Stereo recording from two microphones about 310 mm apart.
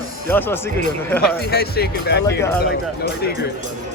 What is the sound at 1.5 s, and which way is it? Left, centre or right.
Speech, left.